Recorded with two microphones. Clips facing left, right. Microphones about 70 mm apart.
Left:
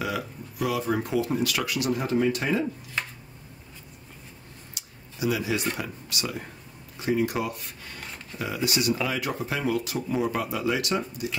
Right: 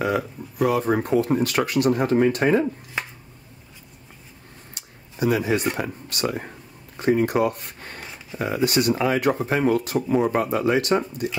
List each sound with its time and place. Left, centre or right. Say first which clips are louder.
0.0 s speech: right 7 dB; right
2.6 s speech: right 4 dB; centre
4.7 s a sound: right 7 dB; right
5.8 s speech: right 6 dB; right
8.0 s a sound: right 1 dB; centre
8.4 s speech: right 6 dB; right